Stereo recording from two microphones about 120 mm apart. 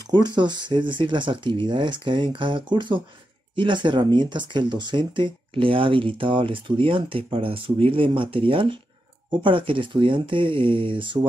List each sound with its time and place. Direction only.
0.0 s speech: 35° right (ahead or behind)